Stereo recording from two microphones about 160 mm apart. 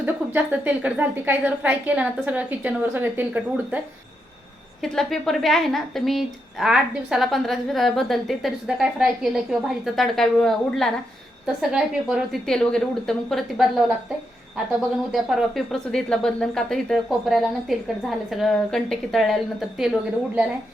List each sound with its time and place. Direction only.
0.0 s a woman's voice: 10° right (ahead or behind)
4.8 s a woman's voice: centre (ahead or behind)
15.1 s a woman's voice: 5° right (ahead or behind)